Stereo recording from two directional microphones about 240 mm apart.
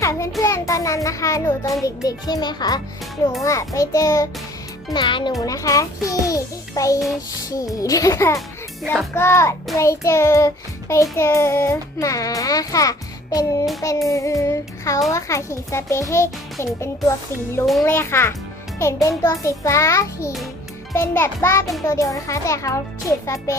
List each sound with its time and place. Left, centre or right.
0.0 s child singing: centre
0.4 s a child's voice: centre
2.0 s child singing: centre
4.9 s a child's voice: centre
5.4 s child singing: centre
8.4 s music: centre
9.1 s child singing: centre